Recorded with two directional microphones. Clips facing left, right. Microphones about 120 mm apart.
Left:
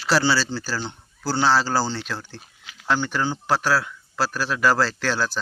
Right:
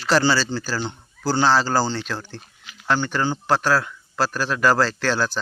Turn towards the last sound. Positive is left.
turn(degrees=5)  # may be behind; listen again after turning